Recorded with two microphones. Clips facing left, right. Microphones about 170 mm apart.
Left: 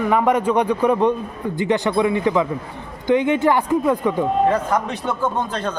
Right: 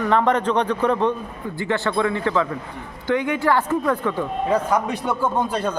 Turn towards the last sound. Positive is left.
turn(degrees=-10)  # may be behind; listen again after turning